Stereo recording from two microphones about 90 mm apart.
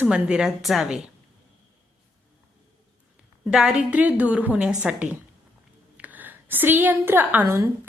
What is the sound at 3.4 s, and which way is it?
A woman's voice, 10° right (ahead or behind).